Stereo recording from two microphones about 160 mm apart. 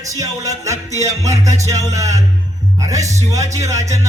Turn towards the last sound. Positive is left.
turn(degrees=-20)  # may be behind; listen again after turning